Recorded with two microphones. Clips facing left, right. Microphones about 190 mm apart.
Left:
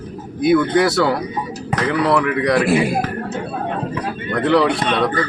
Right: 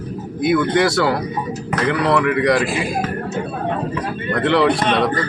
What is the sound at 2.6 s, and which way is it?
Speech, 65° left (ahead or behind).